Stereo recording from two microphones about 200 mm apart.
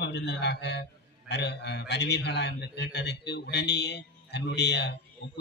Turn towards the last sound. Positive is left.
turn(degrees=55)  # may be behind; listen again after turning